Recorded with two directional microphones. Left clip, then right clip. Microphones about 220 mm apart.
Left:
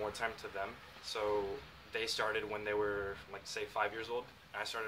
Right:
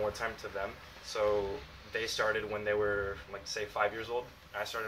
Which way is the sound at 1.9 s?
10° left (ahead or behind).